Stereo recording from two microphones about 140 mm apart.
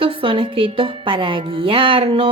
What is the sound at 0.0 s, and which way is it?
A woman's voice, 40° right (ahead or behind).